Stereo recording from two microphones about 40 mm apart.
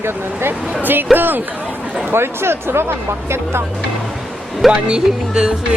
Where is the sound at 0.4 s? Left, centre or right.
Right.